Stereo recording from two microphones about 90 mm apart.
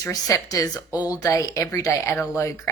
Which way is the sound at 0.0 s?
35° left (ahead or behind).